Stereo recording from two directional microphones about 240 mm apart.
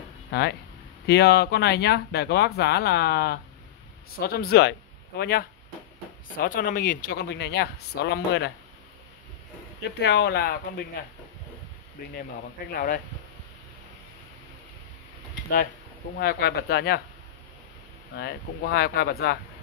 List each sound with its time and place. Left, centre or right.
0.3 s speech: left
9.9 s speech: left
12.1 s speech: left
16.2 s speech: left
18.1 s speech: left